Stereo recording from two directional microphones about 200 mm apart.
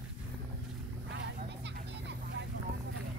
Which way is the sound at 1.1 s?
60° right (ahead or behind).